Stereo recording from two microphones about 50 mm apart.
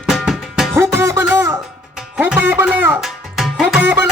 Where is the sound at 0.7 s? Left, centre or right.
Right.